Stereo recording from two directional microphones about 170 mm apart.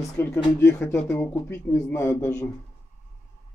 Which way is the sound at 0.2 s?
15° left (ahead or behind).